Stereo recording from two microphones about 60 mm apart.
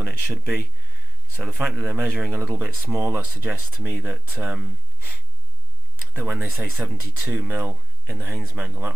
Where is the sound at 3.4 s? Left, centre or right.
Right.